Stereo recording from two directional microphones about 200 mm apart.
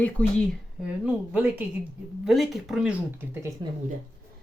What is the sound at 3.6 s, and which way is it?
Speech, 20° right (ahead or behind).